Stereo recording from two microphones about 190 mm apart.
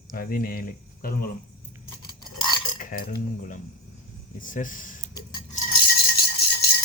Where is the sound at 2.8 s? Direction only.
45° left (ahead or behind).